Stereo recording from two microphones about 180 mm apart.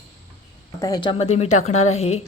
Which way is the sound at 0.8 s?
20° left (ahead or behind).